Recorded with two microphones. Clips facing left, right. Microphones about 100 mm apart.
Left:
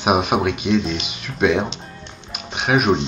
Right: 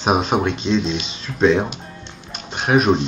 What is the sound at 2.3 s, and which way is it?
Music, 5° left (ahead or behind).